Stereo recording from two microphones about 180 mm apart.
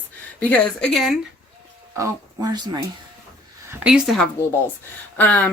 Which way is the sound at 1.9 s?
20° right (ahead or behind).